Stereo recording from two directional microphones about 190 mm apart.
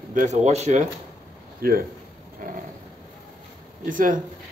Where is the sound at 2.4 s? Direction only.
45° right (ahead or behind).